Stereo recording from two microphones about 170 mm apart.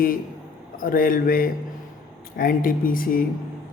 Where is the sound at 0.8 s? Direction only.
55° left (ahead or behind).